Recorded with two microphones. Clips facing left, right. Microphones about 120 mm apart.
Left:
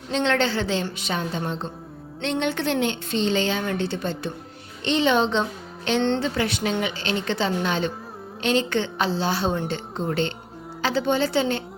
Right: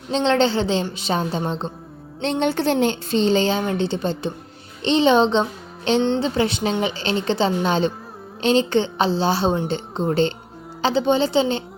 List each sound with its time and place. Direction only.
0.1 s speech: 30° right (ahead or behind)
3.6 s a child's voice: 20° right (ahead or behind)